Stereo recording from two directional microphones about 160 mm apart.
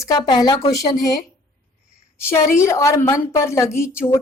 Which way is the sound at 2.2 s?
15° left (ahead or behind).